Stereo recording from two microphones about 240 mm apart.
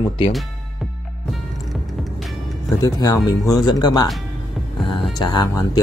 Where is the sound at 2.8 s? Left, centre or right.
Centre.